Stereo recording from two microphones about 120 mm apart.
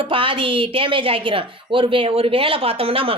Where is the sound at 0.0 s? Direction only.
45° right (ahead or behind).